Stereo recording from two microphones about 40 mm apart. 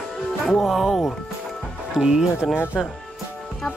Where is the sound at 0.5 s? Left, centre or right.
Centre.